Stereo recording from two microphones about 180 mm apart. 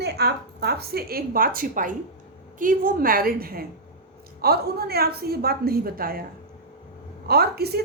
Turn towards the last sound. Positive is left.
turn(degrees=-60)  # may be behind; listen again after turning